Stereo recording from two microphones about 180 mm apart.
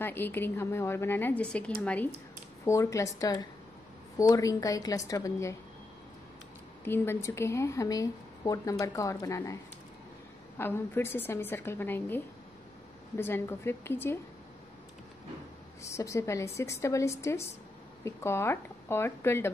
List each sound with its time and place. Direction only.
0.0 s a woman's voice: 10° left (ahead or behind)
6.8 s speech: 15° left (ahead or behind)
10.6 s speech: 10° left (ahead or behind)
13.2 s speech: 10° left (ahead or behind)
15.8 s speech: 15° left (ahead or behind)